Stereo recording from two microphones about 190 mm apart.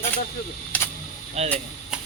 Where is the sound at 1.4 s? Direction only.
35° right (ahead or behind).